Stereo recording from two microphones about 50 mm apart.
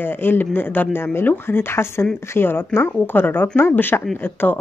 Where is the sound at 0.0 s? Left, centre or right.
Left.